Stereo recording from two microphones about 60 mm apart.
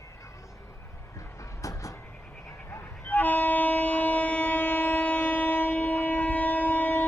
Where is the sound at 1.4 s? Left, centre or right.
Left.